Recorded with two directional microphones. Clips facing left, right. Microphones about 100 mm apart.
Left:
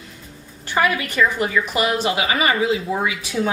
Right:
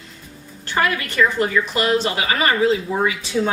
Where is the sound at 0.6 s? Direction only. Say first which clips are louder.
Left 1 dB; 15° left (ahead or behind).